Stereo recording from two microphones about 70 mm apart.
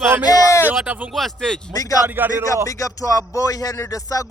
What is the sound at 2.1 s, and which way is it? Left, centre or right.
Speech, right.